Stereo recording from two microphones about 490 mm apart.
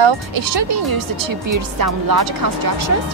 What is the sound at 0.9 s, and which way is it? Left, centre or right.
Speech, right.